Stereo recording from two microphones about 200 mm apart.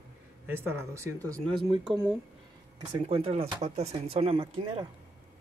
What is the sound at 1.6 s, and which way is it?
Speech, 25° right (ahead or behind).